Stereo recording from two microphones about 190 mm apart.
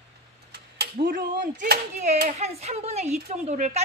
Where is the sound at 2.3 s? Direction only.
35° right (ahead or behind).